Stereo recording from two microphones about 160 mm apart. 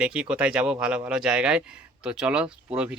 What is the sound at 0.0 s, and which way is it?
Speech, 5° right (ahead or behind).